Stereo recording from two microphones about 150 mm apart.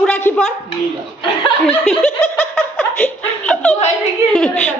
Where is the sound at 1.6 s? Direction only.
Centre (ahead or behind).